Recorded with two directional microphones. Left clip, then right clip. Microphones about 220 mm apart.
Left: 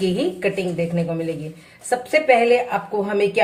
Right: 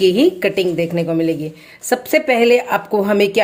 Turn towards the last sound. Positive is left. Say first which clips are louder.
# right 5 dB
turn(degrees=-50)  # may be behind; listen again after turning